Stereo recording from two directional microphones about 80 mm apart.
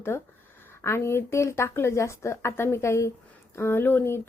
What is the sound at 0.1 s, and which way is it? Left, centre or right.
Speech, left.